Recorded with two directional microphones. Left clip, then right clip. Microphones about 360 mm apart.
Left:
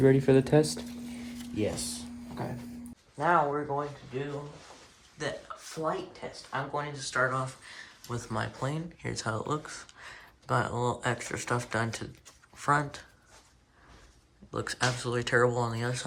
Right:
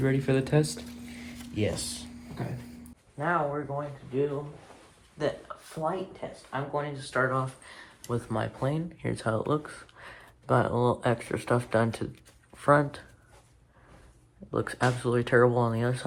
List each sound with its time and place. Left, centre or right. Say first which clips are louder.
0.0 s speech: left 5 dB; left
1.5 s speech: right 1 dB; right
3.2 s speech: left 2 dB; centre
5.1 s speech: right 5 dB; centre
14.5 s speech: right 3 dB; centre